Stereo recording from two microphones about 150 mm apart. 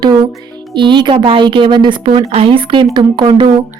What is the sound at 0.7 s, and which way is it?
Speech, 30° right (ahead or behind).